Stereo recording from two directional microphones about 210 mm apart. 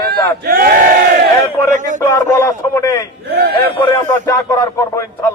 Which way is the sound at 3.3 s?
50° right (ahead or behind).